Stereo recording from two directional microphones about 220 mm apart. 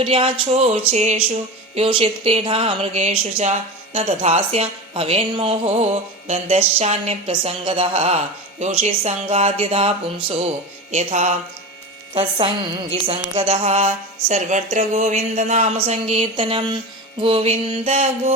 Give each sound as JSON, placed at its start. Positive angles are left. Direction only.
{"t": 0.0, "sound": "speech", "side_deg": -25}
{"t": 10.9, "sound": "music", "side_deg": -30}
{"t": 12.1, "sound": "speech", "side_deg": -25}